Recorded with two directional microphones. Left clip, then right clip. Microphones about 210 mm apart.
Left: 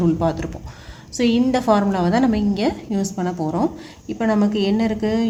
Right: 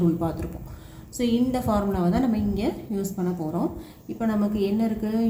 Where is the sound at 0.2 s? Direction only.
45° left (ahead or behind).